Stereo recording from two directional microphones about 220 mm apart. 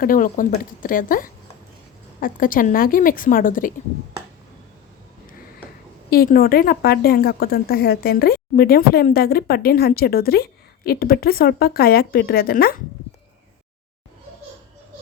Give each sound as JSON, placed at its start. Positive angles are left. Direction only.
{"t": 0.0, "sound": "a woman's voice", "side_deg": 40}
{"t": 6.1, "sound": "speech", "side_deg": 40}